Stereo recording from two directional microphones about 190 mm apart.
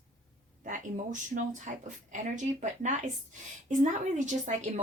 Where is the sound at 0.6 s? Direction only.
45° right (ahead or behind).